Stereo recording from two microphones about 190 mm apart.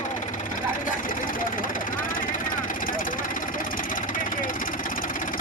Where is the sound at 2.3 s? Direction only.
45° left (ahead or behind).